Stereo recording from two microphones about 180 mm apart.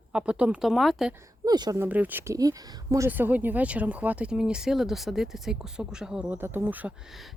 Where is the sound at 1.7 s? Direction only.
10° right (ahead or behind).